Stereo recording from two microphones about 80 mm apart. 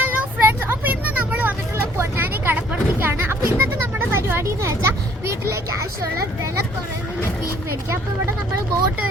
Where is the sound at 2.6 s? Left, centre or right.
Right.